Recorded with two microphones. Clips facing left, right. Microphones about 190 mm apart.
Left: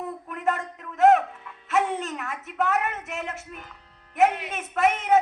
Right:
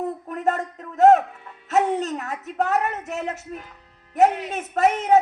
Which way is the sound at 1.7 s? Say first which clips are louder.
Right 4 dB; 40° right (ahead or behind).